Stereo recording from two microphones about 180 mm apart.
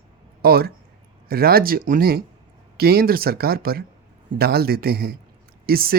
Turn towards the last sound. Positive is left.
turn(degrees=-55)  # may be behind; listen again after turning